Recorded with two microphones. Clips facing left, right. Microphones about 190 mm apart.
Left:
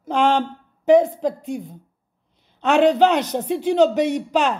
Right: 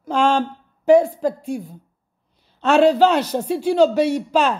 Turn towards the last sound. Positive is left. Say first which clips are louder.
# right 1 dB
turn(degrees=15)  # may be behind; listen again after turning